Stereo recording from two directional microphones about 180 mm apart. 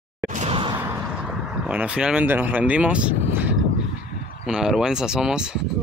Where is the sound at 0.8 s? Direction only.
10° right (ahead or behind).